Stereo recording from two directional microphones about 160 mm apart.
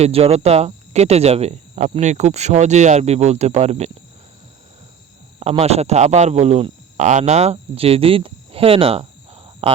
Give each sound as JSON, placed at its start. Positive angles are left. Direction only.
{"t": 0.0, "sound": "speech", "side_deg": -40}
{"t": 5.4, "sound": "a man's voice", "side_deg": -40}